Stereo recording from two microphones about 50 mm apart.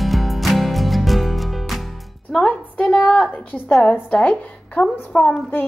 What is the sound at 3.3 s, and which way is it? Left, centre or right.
Speech, left.